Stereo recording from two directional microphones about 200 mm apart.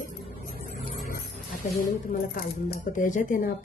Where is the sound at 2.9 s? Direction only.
40° left (ahead or behind).